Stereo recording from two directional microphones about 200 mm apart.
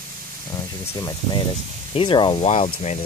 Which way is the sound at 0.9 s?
20° left (ahead or behind).